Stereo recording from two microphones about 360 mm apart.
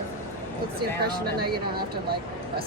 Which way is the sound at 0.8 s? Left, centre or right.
Right.